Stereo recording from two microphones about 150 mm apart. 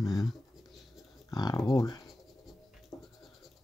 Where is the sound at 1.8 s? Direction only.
25° left (ahead or behind).